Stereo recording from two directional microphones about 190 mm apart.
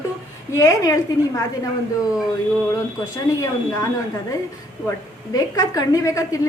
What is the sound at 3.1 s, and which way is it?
Speech, 15° left (ahead or behind).